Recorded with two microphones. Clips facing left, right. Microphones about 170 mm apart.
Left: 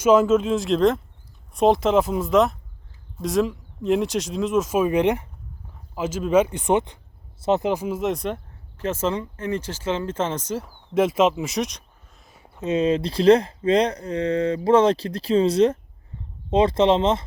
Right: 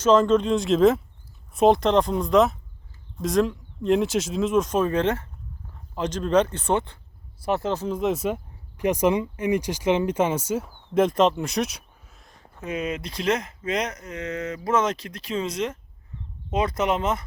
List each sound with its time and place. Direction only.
0.0 s speech: 10° left (ahead or behind)
8.8 s speech: 15° right (ahead or behind)
10.7 s a sound: 5° left (ahead or behind)
12.5 s speech: 25° left (ahead or behind)